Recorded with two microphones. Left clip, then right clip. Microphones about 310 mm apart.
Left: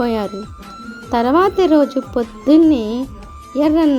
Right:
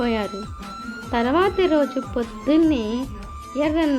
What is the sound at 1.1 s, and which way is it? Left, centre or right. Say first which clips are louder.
Speech: left 6 dB; centre.